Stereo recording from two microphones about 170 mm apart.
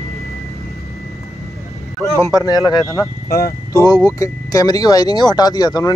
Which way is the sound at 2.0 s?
20° left (ahead or behind).